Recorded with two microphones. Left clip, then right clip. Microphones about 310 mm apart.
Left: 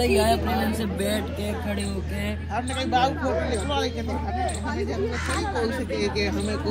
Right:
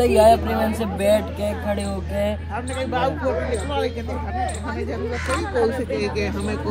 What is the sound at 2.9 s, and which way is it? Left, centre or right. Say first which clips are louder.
Speech: even; centre.